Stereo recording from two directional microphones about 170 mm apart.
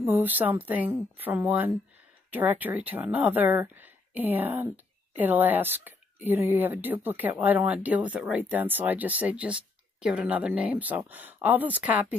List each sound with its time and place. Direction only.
0.0 s speech: 10° right (ahead or behind)